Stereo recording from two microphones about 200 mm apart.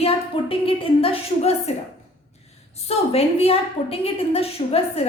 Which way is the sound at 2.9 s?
30° left (ahead or behind).